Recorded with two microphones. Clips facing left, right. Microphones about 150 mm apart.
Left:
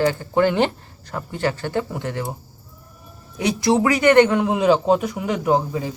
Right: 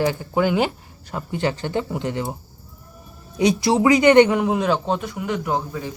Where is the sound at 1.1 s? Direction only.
15° right (ahead or behind).